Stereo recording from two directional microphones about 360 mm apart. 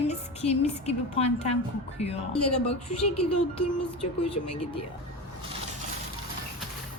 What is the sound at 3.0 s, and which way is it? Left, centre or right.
Speech, left.